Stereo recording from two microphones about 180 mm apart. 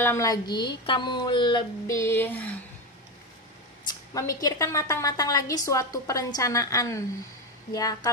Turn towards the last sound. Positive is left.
turn(degrees=20)  # may be behind; listen again after turning